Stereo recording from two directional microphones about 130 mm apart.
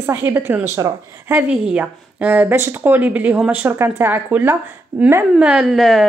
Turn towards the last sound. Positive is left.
turn(degrees=0)  # may be behind; listen again after turning